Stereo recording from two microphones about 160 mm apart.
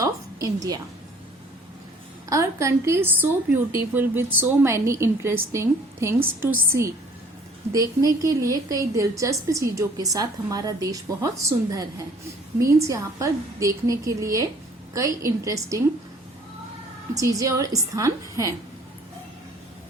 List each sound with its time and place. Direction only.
0.0 s a sound: 20° right (ahead or behind)
2.3 s a woman's voice: 20° right (ahead or behind)
17.2 s a woman's voice: 20° right (ahead or behind)